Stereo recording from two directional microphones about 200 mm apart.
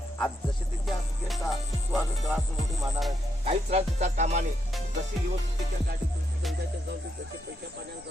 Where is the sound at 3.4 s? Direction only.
30° right (ahead or behind).